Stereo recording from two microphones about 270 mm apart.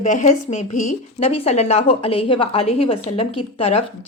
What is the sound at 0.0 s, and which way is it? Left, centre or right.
Speech, left.